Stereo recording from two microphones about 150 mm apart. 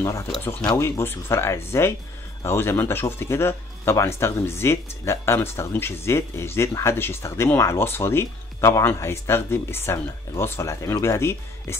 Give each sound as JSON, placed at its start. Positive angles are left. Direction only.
{"t": 0.7, "sound": "speech", "side_deg": 15}